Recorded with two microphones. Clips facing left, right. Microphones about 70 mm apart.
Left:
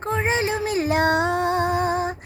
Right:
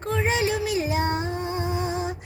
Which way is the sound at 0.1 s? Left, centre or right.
Left.